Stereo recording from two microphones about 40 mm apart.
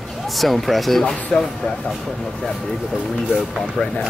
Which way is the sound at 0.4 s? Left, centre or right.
Centre.